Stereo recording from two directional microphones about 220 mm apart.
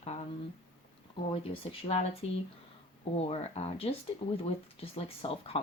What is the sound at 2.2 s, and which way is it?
Speech, 30° left (ahead or behind).